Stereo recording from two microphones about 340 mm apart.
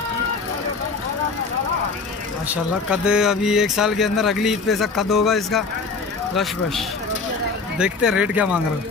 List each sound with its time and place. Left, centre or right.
2.4 s speech: centre